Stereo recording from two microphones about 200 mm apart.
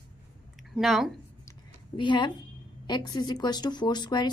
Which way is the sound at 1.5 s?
25° left (ahead or behind).